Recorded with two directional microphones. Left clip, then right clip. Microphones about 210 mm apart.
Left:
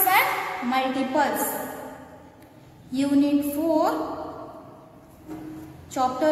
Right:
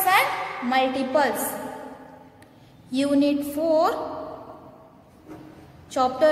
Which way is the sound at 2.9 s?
40° right (ahead or behind).